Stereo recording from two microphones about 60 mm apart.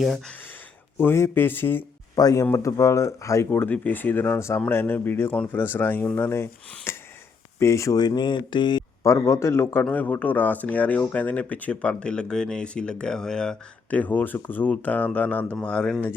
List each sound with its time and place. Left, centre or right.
0.9 s speech: left
2.1 s speech: left
3.5 s speech: left
4.4 s speech: left
4.7 s speech: left
7.6 s speech: left
9.0 s speech: left
9.9 s speech: left; by 13.6 s centre
13.9 s speech: left
15.5 s speech: centre